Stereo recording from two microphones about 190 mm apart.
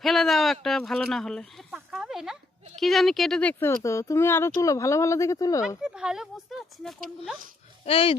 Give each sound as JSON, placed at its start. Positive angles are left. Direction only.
{"t": 0.0, "sound": "speech", "side_deg": 0}
{"t": 5.6, "sound": "speech", "side_deg": -5}
{"t": 7.9, "sound": "speech", "side_deg": 30}